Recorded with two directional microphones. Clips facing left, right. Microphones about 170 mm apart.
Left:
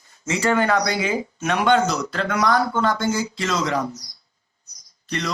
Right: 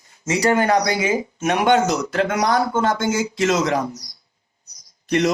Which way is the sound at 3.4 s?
45° right (ahead or behind).